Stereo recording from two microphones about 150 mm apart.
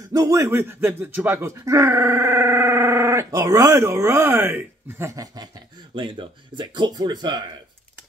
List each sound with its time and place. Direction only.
0.1 s speech: 20° right (ahead or behind)